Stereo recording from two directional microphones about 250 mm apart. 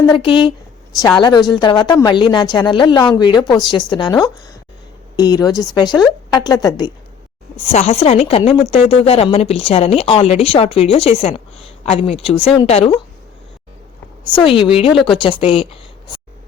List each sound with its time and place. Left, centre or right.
0.0 s a woman's voice: centre
14.3 s speech: left